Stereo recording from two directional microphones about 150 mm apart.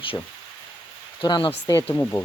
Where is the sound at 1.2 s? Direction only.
30° left (ahead or behind).